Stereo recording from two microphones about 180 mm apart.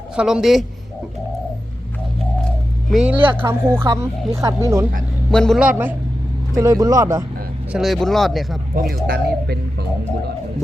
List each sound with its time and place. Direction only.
0.2 s speech: 5° right (ahead or behind)
2.9 s speech: 5° right (ahead or behind)
5.3 s speech: 5° left (ahead or behind); by 7.3 s 15° right (ahead or behind)
7.7 s speech: centre (ahead or behind)
8.7 s speech: 55° right (ahead or behind)